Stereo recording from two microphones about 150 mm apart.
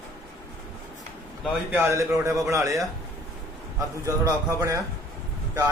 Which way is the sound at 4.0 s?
20° right (ahead or behind).